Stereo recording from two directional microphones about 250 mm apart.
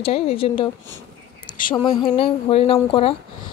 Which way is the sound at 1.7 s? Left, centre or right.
Centre.